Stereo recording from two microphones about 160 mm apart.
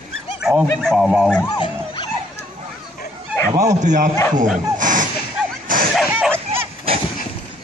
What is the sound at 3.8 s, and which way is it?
Speech, 50° right (ahead or behind).